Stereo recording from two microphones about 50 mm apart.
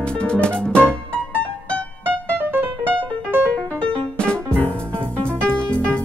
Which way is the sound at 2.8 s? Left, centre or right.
Right.